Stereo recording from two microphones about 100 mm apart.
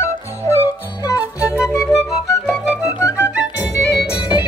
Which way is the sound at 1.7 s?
30° left (ahead or behind).